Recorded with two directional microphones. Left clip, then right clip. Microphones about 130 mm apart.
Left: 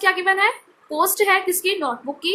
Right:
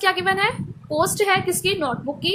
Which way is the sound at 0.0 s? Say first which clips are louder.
Left 2 dB; 25° right (ahead or behind).